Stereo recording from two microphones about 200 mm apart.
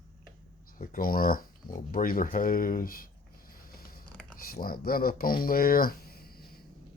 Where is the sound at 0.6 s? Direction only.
45° left (ahead or behind).